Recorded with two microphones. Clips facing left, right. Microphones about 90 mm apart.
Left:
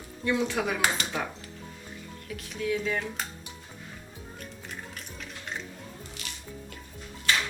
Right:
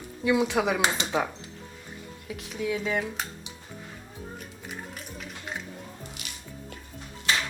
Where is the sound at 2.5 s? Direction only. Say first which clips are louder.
Right 1 dB; 10° right (ahead or behind).